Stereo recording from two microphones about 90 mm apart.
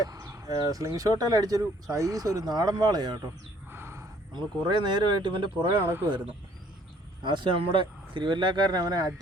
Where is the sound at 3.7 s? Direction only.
30° right (ahead or behind).